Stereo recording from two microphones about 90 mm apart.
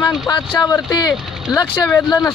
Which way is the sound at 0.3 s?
50° left (ahead or behind).